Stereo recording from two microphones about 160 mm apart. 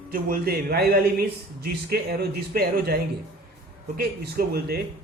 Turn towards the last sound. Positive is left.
turn(degrees=-75)  # may be behind; listen again after turning